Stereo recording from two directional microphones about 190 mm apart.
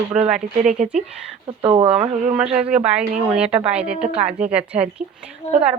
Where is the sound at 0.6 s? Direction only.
40° right (ahead or behind).